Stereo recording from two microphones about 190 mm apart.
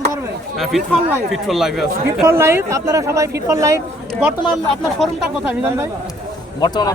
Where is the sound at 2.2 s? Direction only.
15° right (ahead or behind).